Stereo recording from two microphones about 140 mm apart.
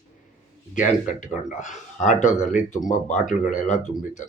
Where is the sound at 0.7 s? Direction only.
70° left (ahead or behind).